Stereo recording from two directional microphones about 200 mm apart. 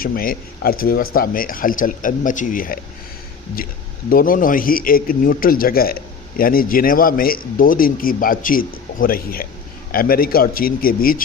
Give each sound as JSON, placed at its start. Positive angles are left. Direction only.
{"t": 0.0, "sound": "a man's voice", "side_deg": 45}
{"t": 4.1, "sound": "a man's voice", "side_deg": 45}